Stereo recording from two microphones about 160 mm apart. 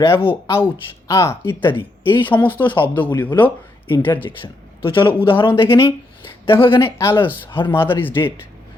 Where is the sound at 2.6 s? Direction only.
30° left (ahead or behind).